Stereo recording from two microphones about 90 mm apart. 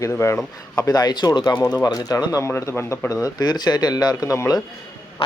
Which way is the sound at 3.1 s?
40° left (ahead or behind).